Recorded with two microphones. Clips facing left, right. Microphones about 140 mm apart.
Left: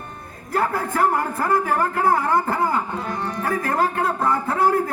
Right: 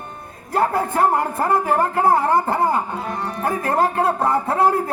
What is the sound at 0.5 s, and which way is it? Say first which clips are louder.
A man's voice: right 3 dB; 25° right (ahead or behind).